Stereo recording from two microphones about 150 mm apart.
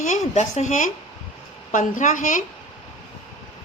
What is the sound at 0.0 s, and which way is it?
A woman's voice, 50° left (ahead or behind).